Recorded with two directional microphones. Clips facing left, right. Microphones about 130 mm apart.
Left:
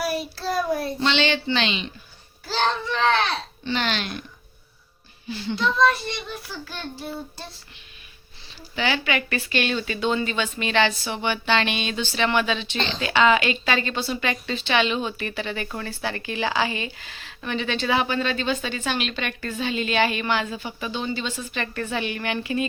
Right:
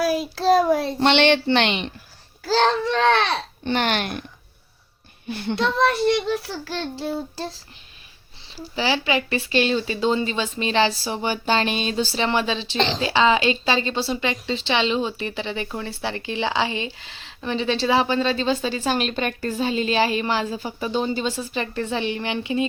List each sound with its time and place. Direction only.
0.2 s a child's voice: 90° right
0.9 s a woman's voice: 60° right (ahead or behind)
2.5 s a child's voice: 75° right (ahead or behind)
3.6 s speech: 55° right (ahead or behind)
5.3 s a child's voice: 60° right (ahead or behind); by 7.6 s 90° right
8.5 s a woman's voice: 30° right (ahead or behind)